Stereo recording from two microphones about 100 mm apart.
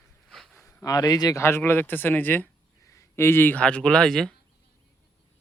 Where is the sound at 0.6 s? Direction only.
35° left (ahead or behind).